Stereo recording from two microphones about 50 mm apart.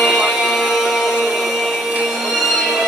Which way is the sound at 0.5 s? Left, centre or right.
Centre.